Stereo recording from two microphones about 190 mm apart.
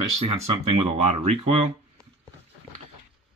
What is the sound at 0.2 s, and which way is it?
Speech, 30° right (ahead or behind).